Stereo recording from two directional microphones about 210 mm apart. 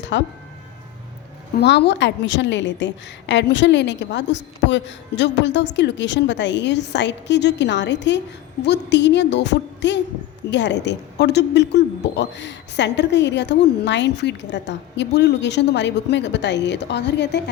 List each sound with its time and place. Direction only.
0.1 s speech: 60° left (ahead or behind)
1.5 s speech: 55° left (ahead or behind)